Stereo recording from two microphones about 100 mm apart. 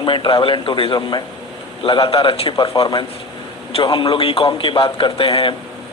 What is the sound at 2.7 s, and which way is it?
A man's voice, 45° left (ahead or behind).